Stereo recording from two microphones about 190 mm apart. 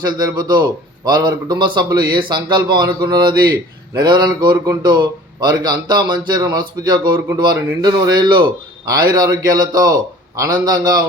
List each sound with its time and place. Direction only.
0.0 s a man's voice: 20° right (ahead or behind)